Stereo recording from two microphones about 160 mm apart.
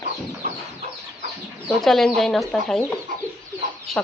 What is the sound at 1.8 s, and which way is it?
Speech, centre (ahead or behind).